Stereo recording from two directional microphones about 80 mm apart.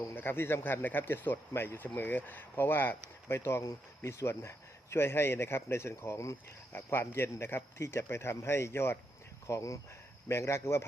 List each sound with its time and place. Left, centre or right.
0.1 s speech: left